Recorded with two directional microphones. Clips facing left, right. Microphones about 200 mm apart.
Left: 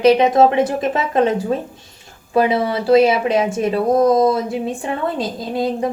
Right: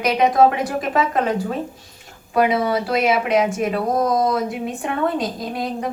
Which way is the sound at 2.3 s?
30° left (ahead or behind).